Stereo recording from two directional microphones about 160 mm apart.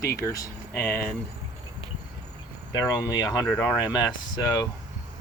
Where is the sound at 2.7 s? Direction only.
25° left (ahead or behind).